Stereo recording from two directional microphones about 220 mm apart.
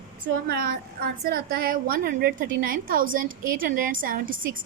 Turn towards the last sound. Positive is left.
turn(degrees=-40)  # may be behind; listen again after turning